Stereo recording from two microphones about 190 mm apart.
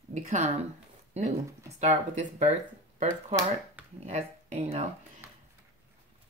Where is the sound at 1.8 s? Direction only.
35° right (ahead or behind).